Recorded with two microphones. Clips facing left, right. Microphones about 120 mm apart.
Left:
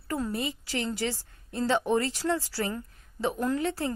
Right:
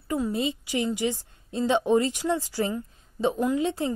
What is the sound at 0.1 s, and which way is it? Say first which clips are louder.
A woman's voice: right 4 dB; 20° right (ahead or behind).